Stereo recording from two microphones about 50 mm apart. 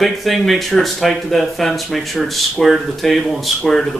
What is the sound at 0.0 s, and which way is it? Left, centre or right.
Speech, centre.